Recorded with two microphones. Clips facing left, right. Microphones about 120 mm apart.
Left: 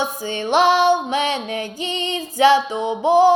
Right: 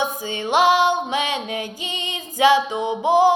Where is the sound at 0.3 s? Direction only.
15° right (ahead or behind).